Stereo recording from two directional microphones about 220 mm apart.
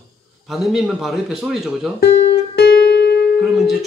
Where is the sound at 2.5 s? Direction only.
45° left (ahead or behind).